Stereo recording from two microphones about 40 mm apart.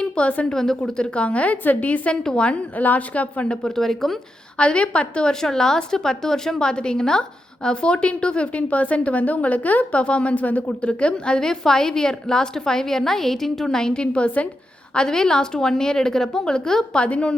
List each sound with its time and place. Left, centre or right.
0.0 s a woman's voice: left
0.5 s a woman's voice: centre
0.9 s a woman's voice: left
2.2 s a woman's voice: left
2.7 s a woman's voice: left
3.5 s a woman's voice: centre
4.5 s a woman's voice: left
5.3 s a woman's voice: centre; by 10.0 s left
10.0 s a woman's voice: left
10.7 s a woman's voice: left
11.3 s a woman's voice: centre; by 14.4 s left
14.9 s a woman's voice: centre